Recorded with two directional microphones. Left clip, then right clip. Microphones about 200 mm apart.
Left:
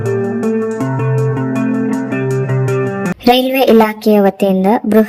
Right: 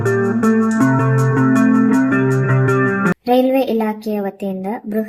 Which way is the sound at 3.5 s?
40° left (ahead or behind).